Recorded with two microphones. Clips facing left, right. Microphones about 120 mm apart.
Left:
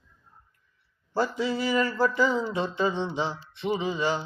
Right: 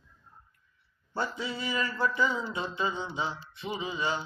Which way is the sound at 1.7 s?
35° left (ahead or behind).